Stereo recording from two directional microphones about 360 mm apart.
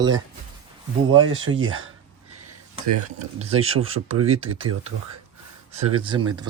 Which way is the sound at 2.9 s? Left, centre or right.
Right.